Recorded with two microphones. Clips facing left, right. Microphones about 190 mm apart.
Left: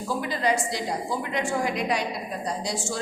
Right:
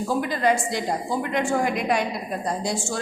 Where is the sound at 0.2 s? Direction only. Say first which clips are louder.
Right 2 dB; 50° right (ahead or behind).